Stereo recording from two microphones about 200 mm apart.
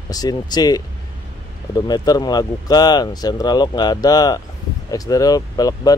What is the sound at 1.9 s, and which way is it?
Speech, 20° left (ahead or behind).